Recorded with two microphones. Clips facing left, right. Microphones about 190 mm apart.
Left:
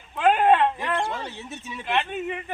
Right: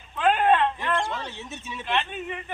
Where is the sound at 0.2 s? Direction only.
10° left (ahead or behind).